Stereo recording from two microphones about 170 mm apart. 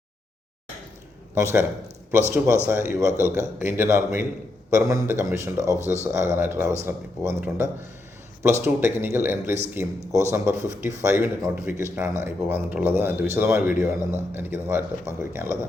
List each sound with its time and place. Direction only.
1.4 s speech: 15° right (ahead or behind)
2.6 s speech: 15° right (ahead or behind)